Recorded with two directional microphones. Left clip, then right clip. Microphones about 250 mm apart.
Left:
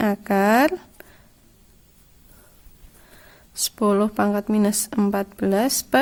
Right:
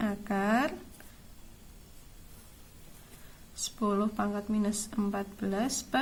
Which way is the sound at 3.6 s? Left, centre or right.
Left.